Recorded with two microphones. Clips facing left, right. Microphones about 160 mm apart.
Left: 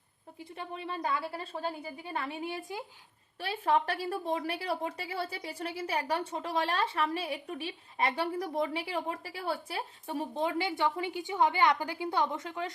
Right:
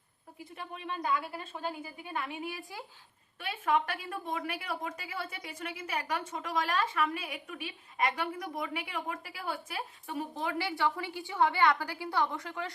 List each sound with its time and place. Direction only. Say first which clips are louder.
0.5 s a woman's voice: left 2 dB; 30° left (ahead or behind)
3.4 s a woman's voice: left 2 dB; 30° left (ahead or behind)